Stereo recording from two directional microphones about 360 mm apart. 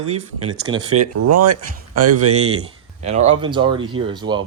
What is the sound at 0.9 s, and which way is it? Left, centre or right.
Speech, right.